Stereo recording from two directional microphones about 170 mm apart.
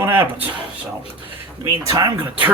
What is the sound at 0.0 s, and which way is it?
Speech, 10° right (ahead or behind).